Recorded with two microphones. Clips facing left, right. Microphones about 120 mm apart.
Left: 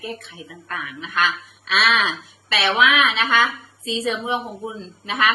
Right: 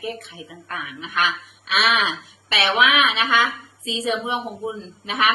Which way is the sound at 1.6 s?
15° right (ahead or behind).